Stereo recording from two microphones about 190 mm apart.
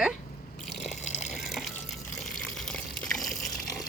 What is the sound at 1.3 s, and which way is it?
Water, centre (ahead or behind).